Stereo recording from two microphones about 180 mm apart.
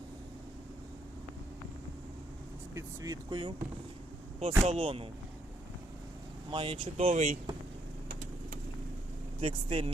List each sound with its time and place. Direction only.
2.7 s speech: 20° right (ahead or behind)
4.4 s speech: 35° right (ahead or behind)
6.5 s speech: 30° right (ahead or behind)
9.4 s speech: 30° right (ahead or behind)